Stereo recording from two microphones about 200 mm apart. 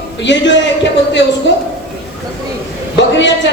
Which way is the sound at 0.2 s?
65° left (ahead or behind).